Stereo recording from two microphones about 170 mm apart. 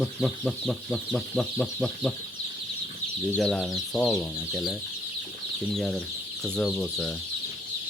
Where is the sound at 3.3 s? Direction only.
5° left (ahead or behind).